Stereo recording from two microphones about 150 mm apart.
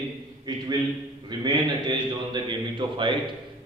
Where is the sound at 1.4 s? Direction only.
30° right (ahead or behind).